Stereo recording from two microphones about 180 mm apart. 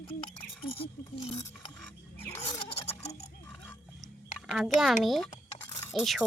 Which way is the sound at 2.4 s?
35° left (ahead or behind).